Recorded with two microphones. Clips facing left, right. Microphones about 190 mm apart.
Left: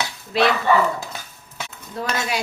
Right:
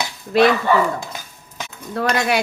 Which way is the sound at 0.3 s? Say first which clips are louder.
Right 5 dB; 50° right (ahead or behind).